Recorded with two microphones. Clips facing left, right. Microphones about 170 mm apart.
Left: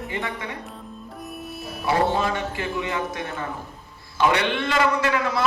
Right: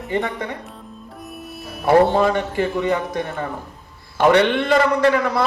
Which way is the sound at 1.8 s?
55° right (ahead or behind).